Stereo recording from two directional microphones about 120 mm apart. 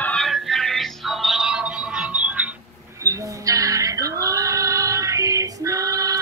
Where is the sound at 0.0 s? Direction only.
5° left (ahead or behind); by 2.4 s 10° right (ahead or behind).